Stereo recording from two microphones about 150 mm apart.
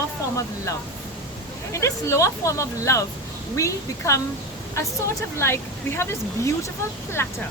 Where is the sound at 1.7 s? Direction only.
20° left (ahead or behind).